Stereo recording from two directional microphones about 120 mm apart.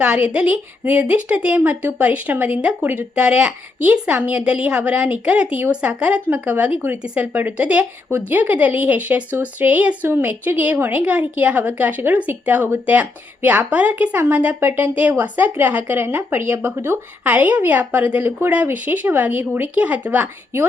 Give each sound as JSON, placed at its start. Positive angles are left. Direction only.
{"t": 0.3, "sound": "a woman's voice", "side_deg": -10}